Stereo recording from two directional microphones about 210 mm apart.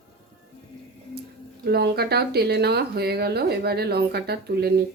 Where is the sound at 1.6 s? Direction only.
50° right (ahead or behind).